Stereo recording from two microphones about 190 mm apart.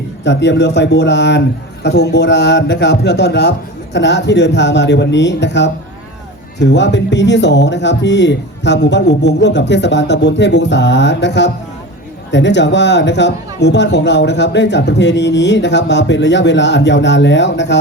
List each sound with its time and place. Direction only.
0.3 s a man's voice: 70° left (ahead or behind)